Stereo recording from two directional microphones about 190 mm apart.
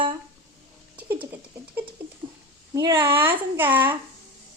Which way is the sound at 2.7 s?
20° right (ahead or behind).